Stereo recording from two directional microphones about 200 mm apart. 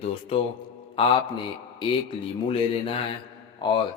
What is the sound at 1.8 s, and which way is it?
A man's voice, 25° left (ahead or behind).